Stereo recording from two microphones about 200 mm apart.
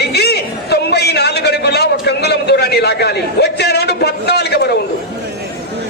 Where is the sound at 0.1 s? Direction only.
55° left (ahead or behind).